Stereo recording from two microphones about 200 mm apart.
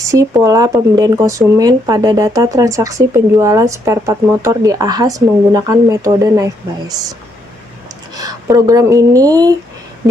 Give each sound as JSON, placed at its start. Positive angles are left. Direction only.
{"t": 0.0, "sound": "speech", "side_deg": -15}
{"t": 8.1, "sound": "speech", "side_deg": -20}